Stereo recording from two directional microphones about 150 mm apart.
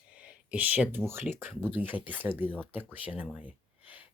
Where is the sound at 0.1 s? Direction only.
10° right (ahead or behind).